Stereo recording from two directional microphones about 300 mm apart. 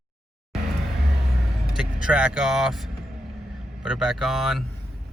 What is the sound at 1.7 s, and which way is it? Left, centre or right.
Speech, centre.